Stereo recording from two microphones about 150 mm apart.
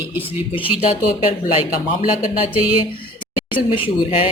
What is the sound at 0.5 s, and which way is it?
Speech, 40° left (ahead or behind).